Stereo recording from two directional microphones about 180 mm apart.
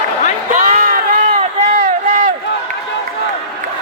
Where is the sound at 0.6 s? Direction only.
50° right (ahead or behind).